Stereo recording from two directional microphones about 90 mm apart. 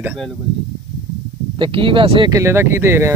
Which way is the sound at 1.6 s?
75° right (ahead or behind).